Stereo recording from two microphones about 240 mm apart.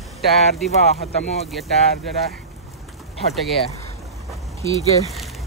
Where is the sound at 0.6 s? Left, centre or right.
Left.